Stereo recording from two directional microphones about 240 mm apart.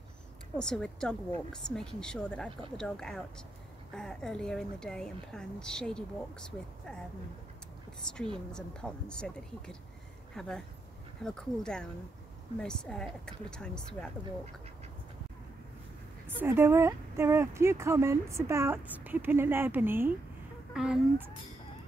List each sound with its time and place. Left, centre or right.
0.6 s a woman's voice: centre
8.5 s a woman's voice: centre
16.3 s a woman's voice: centre